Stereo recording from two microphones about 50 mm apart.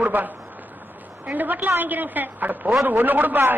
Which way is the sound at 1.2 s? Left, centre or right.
Right.